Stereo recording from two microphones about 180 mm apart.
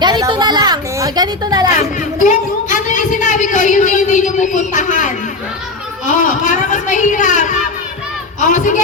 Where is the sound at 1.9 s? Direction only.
45° left (ahead or behind).